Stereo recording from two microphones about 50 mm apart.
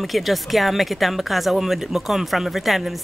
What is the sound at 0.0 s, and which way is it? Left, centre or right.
Speech, centre.